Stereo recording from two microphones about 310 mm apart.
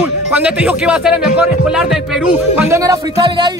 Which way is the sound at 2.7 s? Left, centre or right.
Centre.